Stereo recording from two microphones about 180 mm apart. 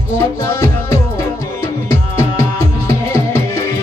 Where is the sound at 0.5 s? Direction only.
15° left (ahead or behind).